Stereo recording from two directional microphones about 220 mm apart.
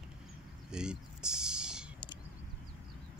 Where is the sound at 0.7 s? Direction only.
5° right (ahead or behind).